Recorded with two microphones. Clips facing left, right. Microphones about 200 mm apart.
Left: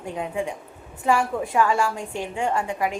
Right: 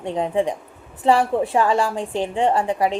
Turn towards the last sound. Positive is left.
turn(degrees=-35)  # may be behind; listen again after turning